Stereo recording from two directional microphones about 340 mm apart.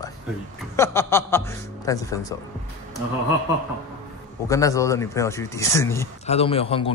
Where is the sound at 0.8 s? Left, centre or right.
Centre.